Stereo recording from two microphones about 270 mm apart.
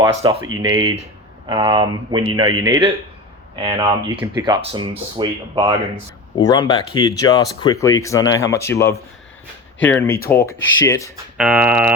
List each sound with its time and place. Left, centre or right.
0.0 s speech: centre
6.4 s speech: centre
11.3 s speech: centre